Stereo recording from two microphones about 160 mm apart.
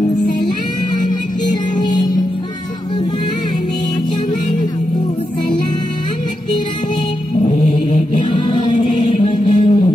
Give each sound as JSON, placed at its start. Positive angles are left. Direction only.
{"t": 7.4, "sound": "chant", "side_deg": 30}
{"t": 9.3, "sound": "music", "side_deg": 30}